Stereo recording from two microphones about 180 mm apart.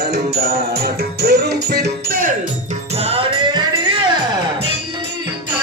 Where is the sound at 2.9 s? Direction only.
35° right (ahead or behind).